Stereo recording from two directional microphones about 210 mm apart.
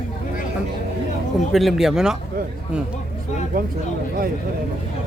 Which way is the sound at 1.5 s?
Centre (ahead or behind).